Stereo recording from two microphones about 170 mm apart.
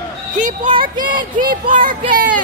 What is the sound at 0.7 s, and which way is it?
Speech, 30° right (ahead or behind).